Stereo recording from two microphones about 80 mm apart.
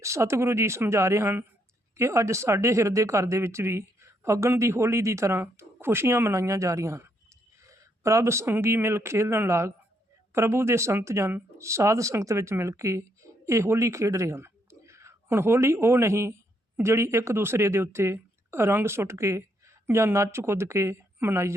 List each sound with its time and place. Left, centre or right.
0.0 s a woman's voice: right